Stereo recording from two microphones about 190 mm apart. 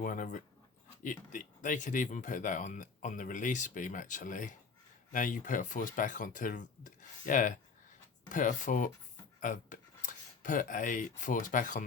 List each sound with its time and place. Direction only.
0.0 s speech: 45° left (ahead or behind)